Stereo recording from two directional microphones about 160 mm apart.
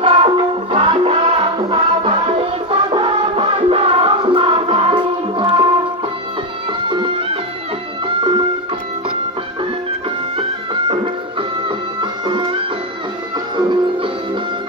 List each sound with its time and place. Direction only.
0.0 s music: 30° right (ahead or behind)
6.9 s music: 30° right (ahead or behind)
10.3 s music: 35° right (ahead or behind)
13.6 s music: 30° right (ahead or behind)